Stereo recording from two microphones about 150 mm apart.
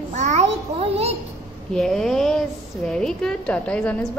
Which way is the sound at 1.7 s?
Centre (ahead or behind).